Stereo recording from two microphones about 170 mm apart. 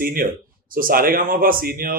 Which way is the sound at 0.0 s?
60° right (ahead or behind).